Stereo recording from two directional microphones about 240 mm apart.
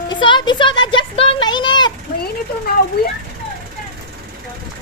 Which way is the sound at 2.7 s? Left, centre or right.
Left.